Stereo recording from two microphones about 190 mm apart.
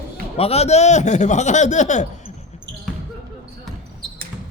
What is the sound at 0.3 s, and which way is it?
A man's voice, 30° left (ahead or behind).